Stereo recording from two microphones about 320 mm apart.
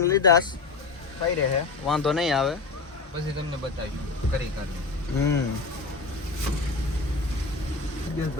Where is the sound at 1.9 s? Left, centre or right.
Centre.